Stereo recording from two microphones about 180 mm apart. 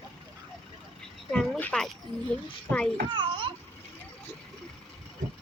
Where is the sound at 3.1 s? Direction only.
25° right (ahead or behind).